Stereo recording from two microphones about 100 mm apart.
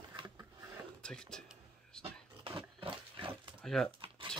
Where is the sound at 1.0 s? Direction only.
10° left (ahead or behind).